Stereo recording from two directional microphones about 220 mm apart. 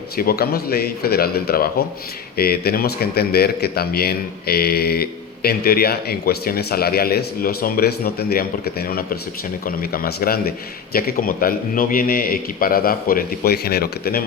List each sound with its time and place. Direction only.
0.2 s a man's voice: 45° left (ahead or behind)